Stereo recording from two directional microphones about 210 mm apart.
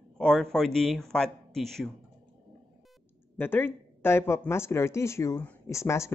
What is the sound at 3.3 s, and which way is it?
Speech, 10° left (ahead or behind).